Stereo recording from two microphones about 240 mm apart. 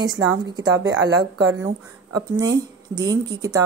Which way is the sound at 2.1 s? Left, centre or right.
Centre.